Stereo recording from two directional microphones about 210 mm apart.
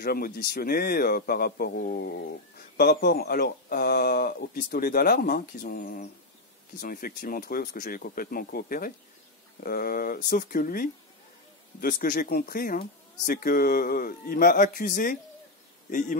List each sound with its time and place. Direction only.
0.0 s speech: 45° left (ahead or behind)